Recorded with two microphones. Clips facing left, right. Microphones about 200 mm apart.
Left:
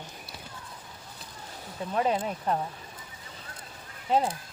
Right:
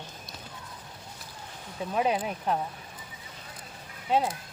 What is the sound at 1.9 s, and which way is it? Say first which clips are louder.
Speech: even; 5° right (ahead or behind).